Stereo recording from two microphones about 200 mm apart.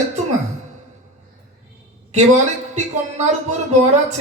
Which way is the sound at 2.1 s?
35° right (ahead or behind).